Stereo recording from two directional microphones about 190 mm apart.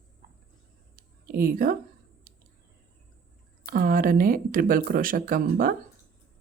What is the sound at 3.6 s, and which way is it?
Speech, 50° right (ahead or behind).